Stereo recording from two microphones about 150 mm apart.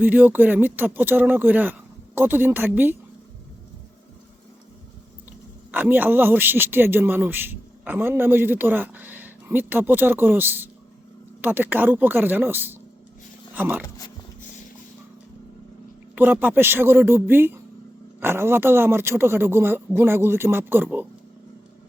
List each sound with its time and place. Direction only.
0.0 s a man's voice: 15° right (ahead or behind)
5.7 s a man's voice: 10° right (ahead or behind)
16.1 s a man's voice: 10° right (ahead or behind)